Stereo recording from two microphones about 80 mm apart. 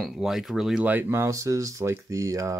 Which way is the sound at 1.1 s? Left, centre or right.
Right.